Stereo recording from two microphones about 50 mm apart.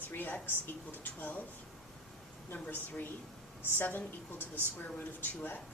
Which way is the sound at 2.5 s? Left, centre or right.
Left.